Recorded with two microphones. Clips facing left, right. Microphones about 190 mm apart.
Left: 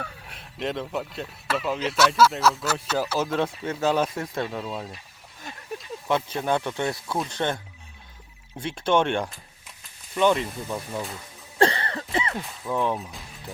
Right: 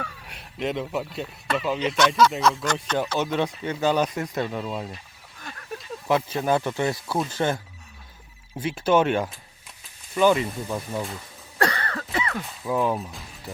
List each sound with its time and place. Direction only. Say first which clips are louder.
0.3 s a man's voice: right 2 dB; centre (ahead or behind)
5.4 s a sound: even; 20° left (ahead or behind)
6.1 s a man's voice: right 2 dB; 5° right (ahead or behind)
11.5 s cough: left 3 dB; 25° left (ahead or behind)
12.1 s a sound: left 1 dB; 25° left (ahead or behind)
12.6 s a man's voice: right 2 dB; 5° right (ahead or behind)